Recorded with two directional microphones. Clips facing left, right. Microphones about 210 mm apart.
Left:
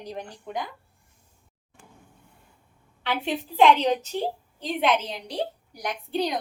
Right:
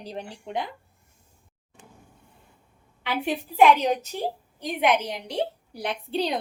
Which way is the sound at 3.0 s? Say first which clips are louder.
Even; 10° right (ahead or behind).